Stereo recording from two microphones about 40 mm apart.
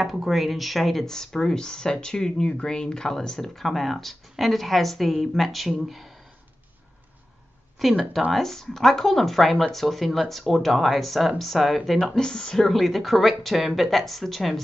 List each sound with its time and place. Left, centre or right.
0.1 s speech: centre
1.0 s speech: centre
7.8 s speech: centre
12.2 s speech: centre
12.6 s speech: centre